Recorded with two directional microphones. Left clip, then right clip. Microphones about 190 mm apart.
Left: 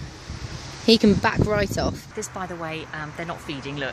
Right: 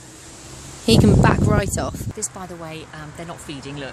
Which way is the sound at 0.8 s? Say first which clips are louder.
Right 2 dB; centre (ahead or behind).